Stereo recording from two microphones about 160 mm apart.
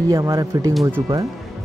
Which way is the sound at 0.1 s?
20° right (ahead or behind).